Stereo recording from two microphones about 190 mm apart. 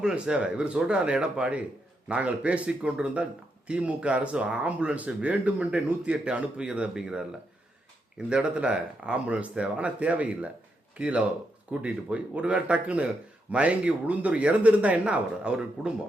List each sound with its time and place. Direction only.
0.0 s speech: 5° right (ahead or behind)
8.3 s speech: 5° right (ahead or behind)